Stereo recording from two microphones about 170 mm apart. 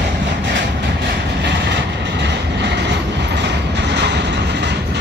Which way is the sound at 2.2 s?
90° right.